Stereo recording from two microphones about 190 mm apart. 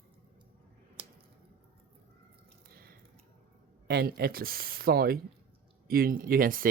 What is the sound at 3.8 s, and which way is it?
Speech, 55° right (ahead or behind).